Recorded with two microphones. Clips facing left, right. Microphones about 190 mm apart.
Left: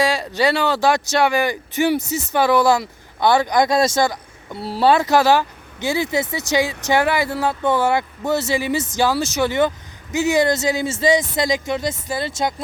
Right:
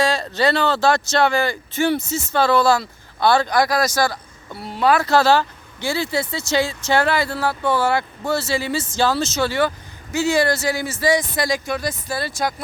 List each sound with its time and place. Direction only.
0.0 s speech: 15° left (ahead or behind); by 4.9 s 30° left (ahead or behind)
4.9 s speech: 15° left (ahead or behind)